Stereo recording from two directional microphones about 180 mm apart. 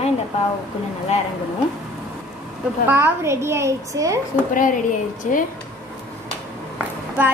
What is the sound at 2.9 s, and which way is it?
A woman's voice, 10° right (ahead or behind).